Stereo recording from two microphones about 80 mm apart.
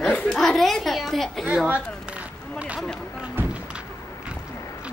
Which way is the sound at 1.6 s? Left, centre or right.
Centre.